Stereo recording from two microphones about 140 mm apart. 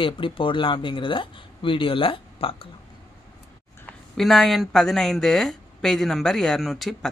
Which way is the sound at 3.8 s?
Centre (ahead or behind).